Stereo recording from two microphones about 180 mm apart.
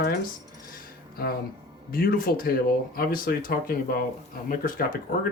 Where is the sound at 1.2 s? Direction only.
55° left (ahead or behind).